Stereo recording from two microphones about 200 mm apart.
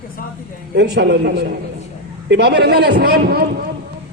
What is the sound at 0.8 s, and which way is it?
Speech, 60° right (ahead or behind).